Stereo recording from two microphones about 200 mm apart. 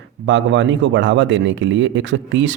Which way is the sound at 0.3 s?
70° right (ahead or behind).